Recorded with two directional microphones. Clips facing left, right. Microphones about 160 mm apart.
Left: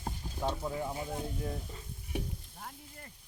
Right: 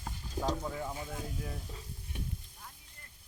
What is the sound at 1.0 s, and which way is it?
Speech, 25° left (ahead or behind).